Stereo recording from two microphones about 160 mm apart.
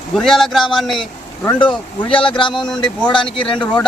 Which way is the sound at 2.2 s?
30° left (ahead or behind).